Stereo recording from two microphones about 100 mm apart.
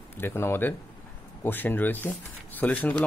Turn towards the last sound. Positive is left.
turn(degrees=15)  # may be behind; listen again after turning